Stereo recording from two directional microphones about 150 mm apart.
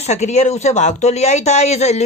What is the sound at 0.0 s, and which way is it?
Speech, 50° left (ahead or behind).